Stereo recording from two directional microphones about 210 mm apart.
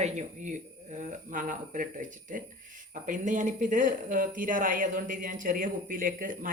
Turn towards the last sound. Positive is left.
turn(degrees=-40)  # may be behind; listen again after turning